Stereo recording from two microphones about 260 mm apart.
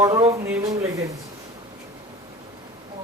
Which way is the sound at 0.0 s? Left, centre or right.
Centre.